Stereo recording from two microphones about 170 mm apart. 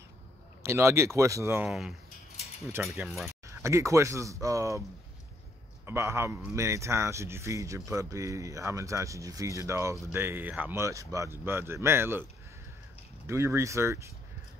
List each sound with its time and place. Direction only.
0.6 s speech: 15° right (ahead or behind)
1.7 s speech: centre (ahead or behind)
3.4 s speech: 15° right (ahead or behind)
5.9 s speech: 15° right (ahead or behind)
13.3 s speech: 15° right (ahead or behind)